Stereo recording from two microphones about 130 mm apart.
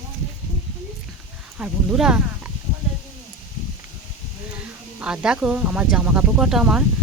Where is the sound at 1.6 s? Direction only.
5° right (ahead or behind).